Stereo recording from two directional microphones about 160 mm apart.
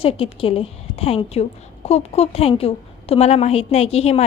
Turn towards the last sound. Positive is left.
turn(degrees=40)  # may be behind; listen again after turning